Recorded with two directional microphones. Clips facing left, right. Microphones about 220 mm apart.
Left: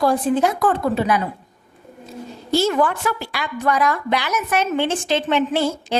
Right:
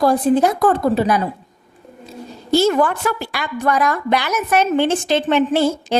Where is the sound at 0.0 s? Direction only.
40° right (ahead or behind).